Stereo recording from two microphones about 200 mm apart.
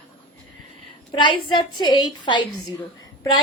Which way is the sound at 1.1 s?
25° left (ahead or behind).